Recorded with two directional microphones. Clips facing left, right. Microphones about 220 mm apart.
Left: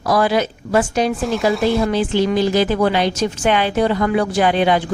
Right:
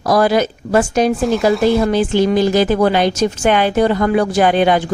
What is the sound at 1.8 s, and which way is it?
A woman's voice, 45° right (ahead or behind).